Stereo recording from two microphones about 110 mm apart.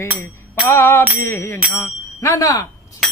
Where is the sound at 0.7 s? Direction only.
20° left (ahead or behind).